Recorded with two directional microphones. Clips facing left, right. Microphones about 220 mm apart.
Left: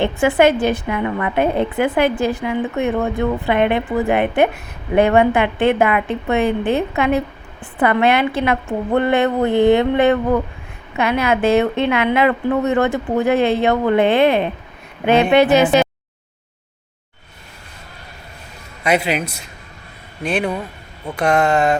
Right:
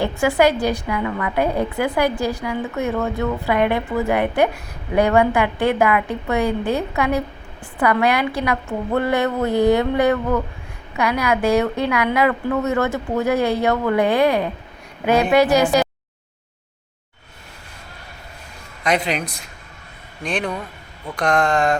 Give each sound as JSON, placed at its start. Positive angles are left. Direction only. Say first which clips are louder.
{"t": 0.0, "sound": "a woman's voice", "louder": "left 3 dB", "side_deg": 20}
{"t": 18.8, "sound": "a man's voice", "louder": "left 3 dB", "side_deg": 10}